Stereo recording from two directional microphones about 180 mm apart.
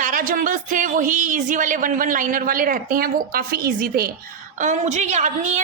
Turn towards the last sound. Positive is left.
turn(degrees=-40)  # may be behind; listen again after turning